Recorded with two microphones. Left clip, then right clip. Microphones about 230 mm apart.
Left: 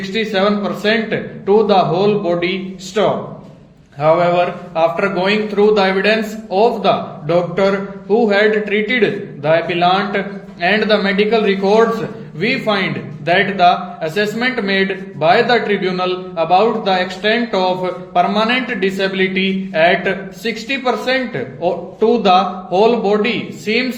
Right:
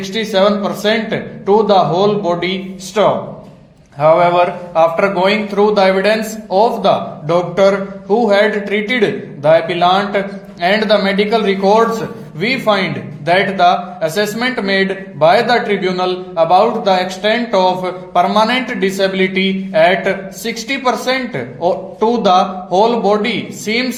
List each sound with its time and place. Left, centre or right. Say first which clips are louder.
0.0 s speech: right 3 dB; centre